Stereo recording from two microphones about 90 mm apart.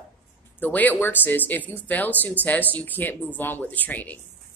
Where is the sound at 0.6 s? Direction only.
20° left (ahead or behind).